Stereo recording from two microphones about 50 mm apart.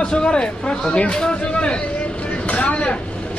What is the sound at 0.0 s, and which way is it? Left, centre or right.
Speech, centre.